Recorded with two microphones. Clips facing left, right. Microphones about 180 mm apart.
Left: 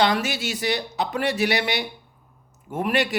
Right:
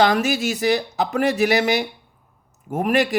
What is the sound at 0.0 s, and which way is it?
Speech, 40° right (ahead or behind).